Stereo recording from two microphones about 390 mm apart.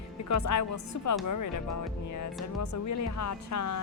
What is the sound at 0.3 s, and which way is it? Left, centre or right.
Speech, left.